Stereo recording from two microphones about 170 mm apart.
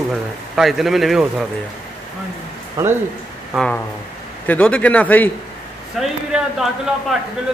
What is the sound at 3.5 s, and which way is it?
Speech, 5° right (ahead or behind).